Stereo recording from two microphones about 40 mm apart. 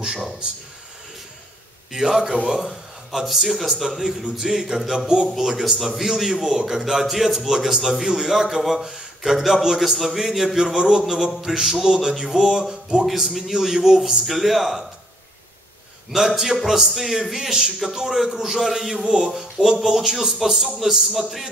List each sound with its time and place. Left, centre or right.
1.9 s a man's voice: centre
2.7 s a man's voice: centre
5.0 s speech: right
5.4 s a man's voice: centre
13.0 s a man's voice: centre
14.2 s speech: centre
16.2 s a man's voice: centre